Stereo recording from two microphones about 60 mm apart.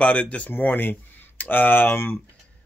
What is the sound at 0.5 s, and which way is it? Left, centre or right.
Speech, left.